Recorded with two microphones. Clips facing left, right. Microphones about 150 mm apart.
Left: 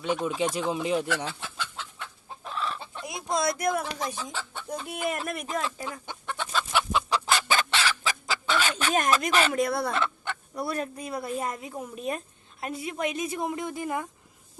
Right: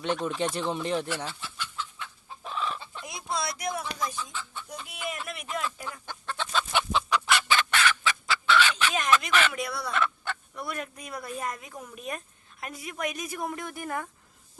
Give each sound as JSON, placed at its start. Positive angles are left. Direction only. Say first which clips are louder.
{"t": 0.0, "sound": "speech", "louder": "left 1 dB", "side_deg": 5}
{"t": 2.4, "sound": "chicken", "louder": "even", "side_deg": 0}
{"t": 3.0, "sound": "speech", "louder": "left 6 dB", "side_deg": 45}
{"t": 4.1, "sound": "speech", "louder": "left 2 dB", "side_deg": 85}
{"t": 4.7, "sound": "speech", "louder": "left 7 dB", "side_deg": 45}
{"t": 6.1, "sound": "chicken", "louder": "even", "side_deg": 15}
{"t": 7.1, "sound": "chicken", "louder": "right 2 dB", "side_deg": 35}
{"t": 7.7, "sound": "fowl", "louder": "right 1 dB", "side_deg": 30}
{"t": 10.5, "sound": "speech", "louder": "left 9 dB", "side_deg": 35}